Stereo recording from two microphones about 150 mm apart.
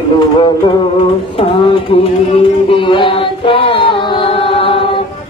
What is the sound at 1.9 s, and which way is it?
Music, 35° left (ahead or behind).